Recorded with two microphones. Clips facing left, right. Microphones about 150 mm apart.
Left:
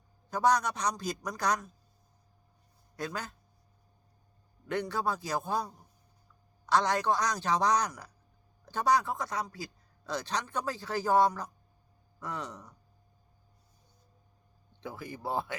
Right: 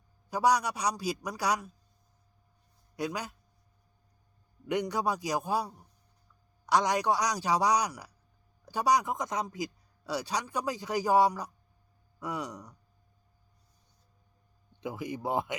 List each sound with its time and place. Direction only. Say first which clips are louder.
0.3 s speech: right 1 dB; 10° right (ahead or behind)
2.9 s a man's voice: right 3 dB; 15° right (ahead or behind)
4.7 s speech: right 2 dB; 15° right (ahead or behind)
14.8 s speech: right 5 dB; 15° right (ahead or behind)